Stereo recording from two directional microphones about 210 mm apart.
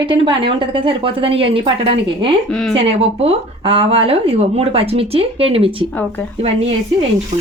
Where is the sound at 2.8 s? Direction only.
30° right (ahead or behind).